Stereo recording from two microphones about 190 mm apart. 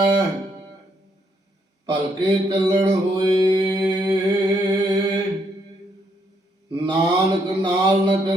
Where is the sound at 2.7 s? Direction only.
25° right (ahead or behind).